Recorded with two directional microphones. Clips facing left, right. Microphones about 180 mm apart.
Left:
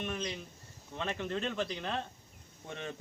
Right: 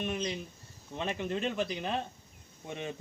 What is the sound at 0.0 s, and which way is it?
Speech, 20° right (ahead or behind).